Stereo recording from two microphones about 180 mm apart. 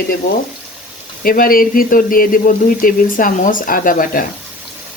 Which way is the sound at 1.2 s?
55° left (ahead or behind).